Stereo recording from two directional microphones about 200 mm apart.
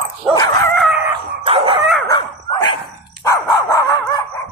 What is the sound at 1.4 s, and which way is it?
Dog, 25° right (ahead or behind).